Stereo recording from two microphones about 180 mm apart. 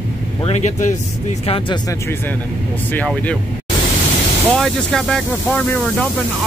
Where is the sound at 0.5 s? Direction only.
40° left (ahead or behind).